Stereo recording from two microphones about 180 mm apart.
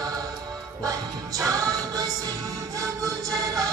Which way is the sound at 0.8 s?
20° right (ahead or behind).